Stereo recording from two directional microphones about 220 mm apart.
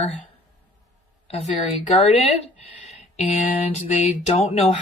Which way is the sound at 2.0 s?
30° left (ahead or behind).